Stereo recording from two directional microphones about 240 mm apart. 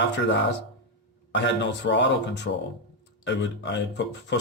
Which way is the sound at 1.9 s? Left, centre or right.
Left.